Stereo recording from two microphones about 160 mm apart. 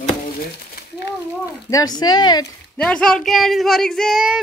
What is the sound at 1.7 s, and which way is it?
Speech, 25° left (ahead or behind).